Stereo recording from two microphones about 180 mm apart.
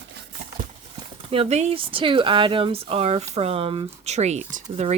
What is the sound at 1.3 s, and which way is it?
Speech, 35° right (ahead or behind).